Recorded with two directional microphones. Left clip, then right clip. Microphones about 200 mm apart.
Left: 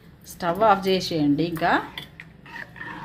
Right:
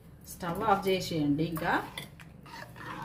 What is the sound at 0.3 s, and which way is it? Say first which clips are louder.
Speech: left 9 dB; 45° left (ahead or behind).